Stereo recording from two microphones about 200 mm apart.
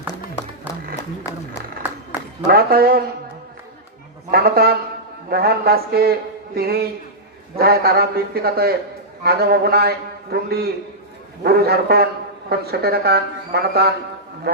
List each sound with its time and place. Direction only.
2.5 s a man's voice: 50° right (ahead or behind)
4.3 s a man's voice: 50° right (ahead or behind)